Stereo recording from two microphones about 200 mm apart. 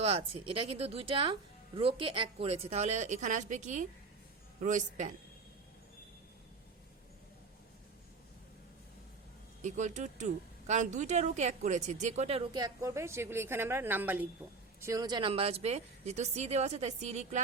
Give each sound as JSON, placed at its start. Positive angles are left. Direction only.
{"t": 0.0, "sound": "speech", "side_deg": -30}
{"t": 9.6, "sound": "speech", "side_deg": -40}